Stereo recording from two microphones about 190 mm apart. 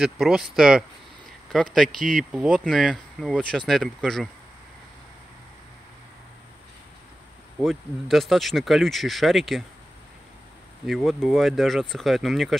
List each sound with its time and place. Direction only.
0.0 s speech: centre (ahead or behind)
7.6 s speech: centre (ahead or behind)
10.9 s speech: centre (ahead or behind)